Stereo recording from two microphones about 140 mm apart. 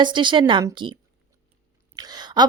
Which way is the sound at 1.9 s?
30° right (ahead or behind).